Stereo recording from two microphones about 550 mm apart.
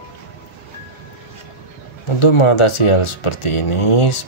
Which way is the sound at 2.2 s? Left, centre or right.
Left.